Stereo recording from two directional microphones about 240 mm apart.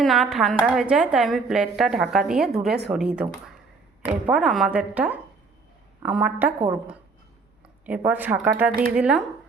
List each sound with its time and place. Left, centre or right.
0.0 s a woman's voice: centre